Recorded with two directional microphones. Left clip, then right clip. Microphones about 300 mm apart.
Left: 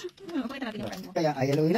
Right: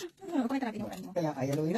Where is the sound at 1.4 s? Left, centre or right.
Centre.